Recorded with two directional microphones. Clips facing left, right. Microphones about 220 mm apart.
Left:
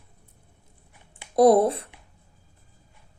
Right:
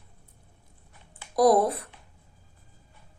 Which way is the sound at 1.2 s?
25° left (ahead or behind).